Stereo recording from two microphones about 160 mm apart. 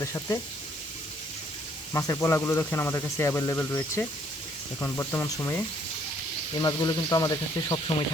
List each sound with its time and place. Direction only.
0.0 s speech: 20° left (ahead or behind)
1.9 s speech: 20° left (ahead or behind)